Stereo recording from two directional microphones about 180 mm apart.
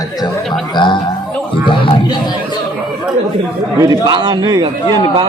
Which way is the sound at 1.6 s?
25° left (ahead or behind).